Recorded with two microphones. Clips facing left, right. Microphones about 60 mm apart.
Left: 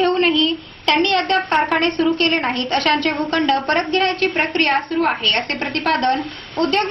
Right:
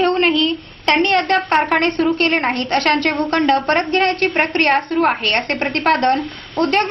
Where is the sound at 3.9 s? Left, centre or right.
Right.